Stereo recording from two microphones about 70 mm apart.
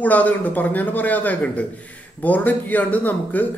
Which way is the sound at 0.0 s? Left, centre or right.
Left.